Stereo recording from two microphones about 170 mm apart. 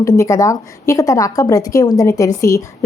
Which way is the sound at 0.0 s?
20° left (ahead or behind).